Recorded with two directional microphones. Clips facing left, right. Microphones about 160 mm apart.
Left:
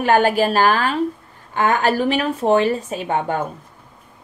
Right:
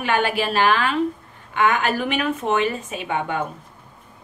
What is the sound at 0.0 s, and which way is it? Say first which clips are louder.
Speech: left 6 dB; 40° left (ahead or behind).